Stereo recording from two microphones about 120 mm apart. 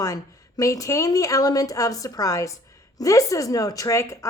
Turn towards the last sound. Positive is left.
turn(degrees=25)  # may be behind; listen again after turning